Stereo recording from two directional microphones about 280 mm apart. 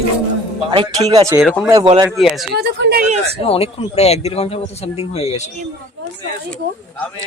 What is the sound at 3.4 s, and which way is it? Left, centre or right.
Speech, left.